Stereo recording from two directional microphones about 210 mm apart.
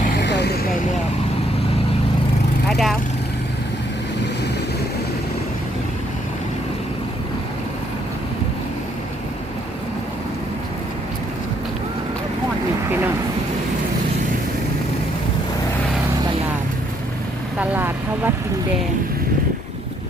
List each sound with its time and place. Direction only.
0.2 s vehicle: 55° left (ahead or behind)
2.6 s vehicle: centre (ahead or behind)
17.6 s vehicle: 10° right (ahead or behind)